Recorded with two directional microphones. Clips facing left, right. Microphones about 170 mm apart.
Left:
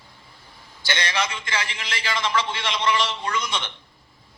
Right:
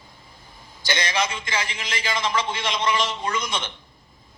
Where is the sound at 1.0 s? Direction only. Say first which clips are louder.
Right 1 dB; 15° right (ahead or behind).